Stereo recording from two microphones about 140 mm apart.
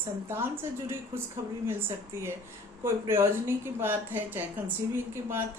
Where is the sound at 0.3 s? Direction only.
15° right (ahead or behind).